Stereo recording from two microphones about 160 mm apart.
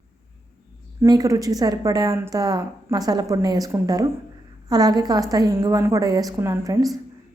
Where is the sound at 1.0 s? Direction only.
20° right (ahead or behind).